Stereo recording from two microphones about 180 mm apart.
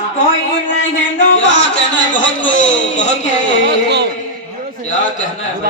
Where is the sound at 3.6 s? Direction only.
65° right (ahead or behind).